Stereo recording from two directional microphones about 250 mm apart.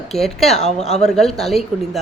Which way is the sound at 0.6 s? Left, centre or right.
Left.